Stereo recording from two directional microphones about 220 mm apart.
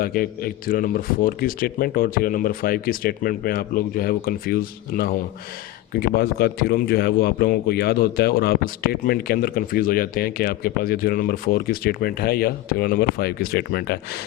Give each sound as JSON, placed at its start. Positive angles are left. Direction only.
{"t": 0.0, "sound": "a man's voice", "side_deg": 40}